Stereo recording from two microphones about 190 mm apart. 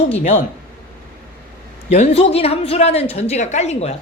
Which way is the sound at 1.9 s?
35° left (ahead or behind).